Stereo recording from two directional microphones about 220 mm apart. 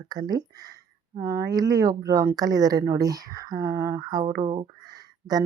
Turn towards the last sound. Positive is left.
turn(degrees=-15)  # may be behind; listen again after turning